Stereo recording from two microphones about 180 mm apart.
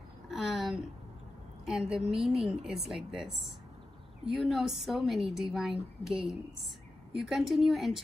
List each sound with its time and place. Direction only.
0.3 s a sound: centre (ahead or behind)
1.7 s a woman's voice: centre (ahead or behind)
7.2 s a woman's voice: centre (ahead or behind)